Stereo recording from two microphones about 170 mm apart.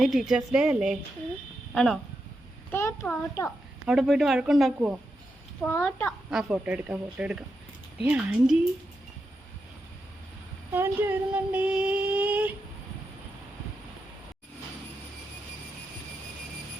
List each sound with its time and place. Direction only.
0.0 s speech: centre (ahead or behind)
2.7 s a child's voice: 15° left (ahead or behind)
3.8 s speech: 5° right (ahead or behind)
5.6 s a child's voice: 10° left (ahead or behind)
6.3 s child singing: 5° right (ahead or behind)
10.7 s child singing: 15° right (ahead or behind)